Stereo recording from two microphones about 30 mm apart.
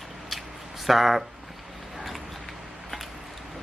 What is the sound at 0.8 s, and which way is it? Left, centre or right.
Speech, centre.